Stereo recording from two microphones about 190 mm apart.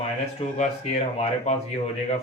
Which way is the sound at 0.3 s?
35° left (ahead or behind).